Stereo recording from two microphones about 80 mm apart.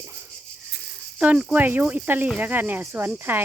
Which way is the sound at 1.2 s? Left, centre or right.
Centre.